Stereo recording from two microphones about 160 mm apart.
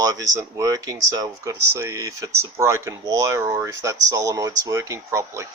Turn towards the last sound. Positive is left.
turn(degrees=-15)  # may be behind; listen again after turning